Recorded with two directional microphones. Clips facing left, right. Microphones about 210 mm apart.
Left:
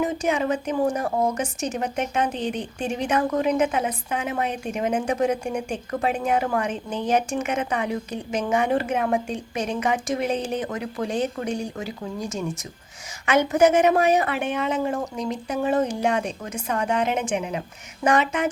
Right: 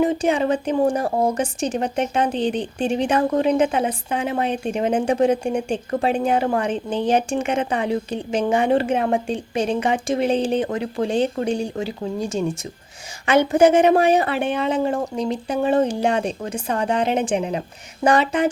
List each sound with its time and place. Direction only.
0.0 s a woman's voice: 30° right (ahead or behind)